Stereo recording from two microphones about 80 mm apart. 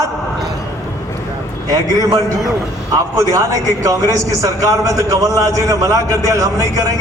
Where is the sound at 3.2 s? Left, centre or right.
Right.